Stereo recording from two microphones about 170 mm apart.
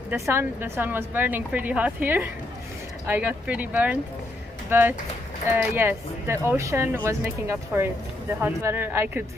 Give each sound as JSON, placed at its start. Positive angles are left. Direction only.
{"t": 0.1, "sound": "a woman's voice", "side_deg": -10}